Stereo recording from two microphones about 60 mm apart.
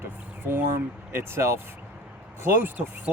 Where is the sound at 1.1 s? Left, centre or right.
Right.